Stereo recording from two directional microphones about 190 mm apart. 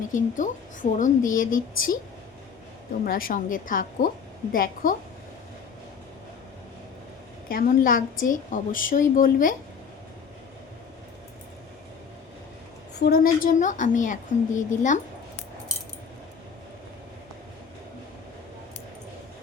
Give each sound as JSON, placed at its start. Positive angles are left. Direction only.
{"t": 0.1, "sound": "a woman's voice", "side_deg": 40}
{"t": 3.0, "sound": "a woman's voice", "side_deg": 50}
{"t": 7.4, "sound": "a woman's voice", "side_deg": 45}
{"t": 13.0, "sound": "a woman's voice", "side_deg": 50}